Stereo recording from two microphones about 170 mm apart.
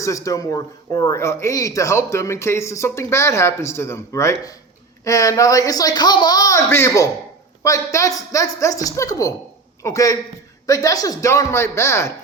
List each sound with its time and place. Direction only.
0.0 s speech: 20° left (ahead or behind)